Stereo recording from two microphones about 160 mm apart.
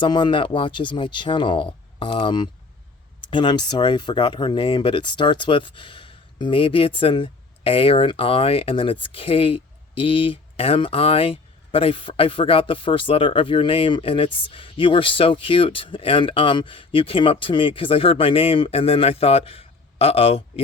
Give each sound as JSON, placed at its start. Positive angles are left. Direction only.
{"t": 0.0, "sound": "speech", "side_deg": 30}